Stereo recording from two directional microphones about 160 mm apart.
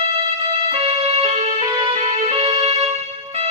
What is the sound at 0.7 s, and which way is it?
Music, 40° right (ahead or behind).